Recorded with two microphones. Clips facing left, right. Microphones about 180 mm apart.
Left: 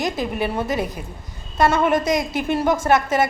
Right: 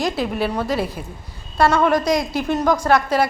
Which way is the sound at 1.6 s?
10° left (ahead or behind).